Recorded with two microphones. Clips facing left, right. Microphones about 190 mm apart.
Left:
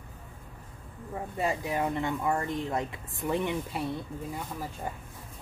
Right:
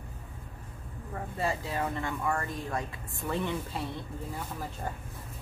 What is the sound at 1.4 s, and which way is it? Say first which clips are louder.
Speech: left 2 dB; 20° left (ahead or behind).